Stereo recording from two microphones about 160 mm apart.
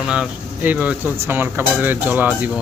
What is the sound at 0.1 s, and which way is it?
Dishes, 10° right (ahead or behind).